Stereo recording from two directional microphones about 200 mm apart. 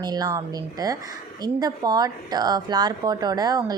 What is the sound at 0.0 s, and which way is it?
A woman's voice, 20° right (ahead or behind).